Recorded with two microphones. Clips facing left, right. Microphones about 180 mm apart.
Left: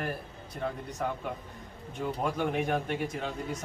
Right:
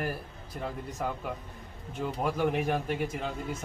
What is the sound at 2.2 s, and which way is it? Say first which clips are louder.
Speech: right 2 dB; centre (ahead or behind).